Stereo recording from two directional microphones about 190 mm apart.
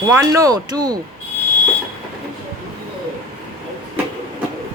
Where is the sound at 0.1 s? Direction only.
15° right (ahead or behind).